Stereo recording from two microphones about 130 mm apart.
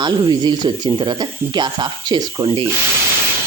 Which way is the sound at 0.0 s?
35° right (ahead or behind).